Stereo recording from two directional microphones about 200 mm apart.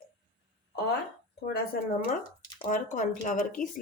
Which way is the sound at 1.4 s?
50° left (ahead or behind).